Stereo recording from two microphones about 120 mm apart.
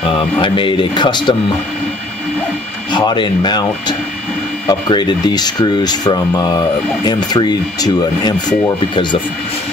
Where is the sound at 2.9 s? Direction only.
40° left (ahead or behind).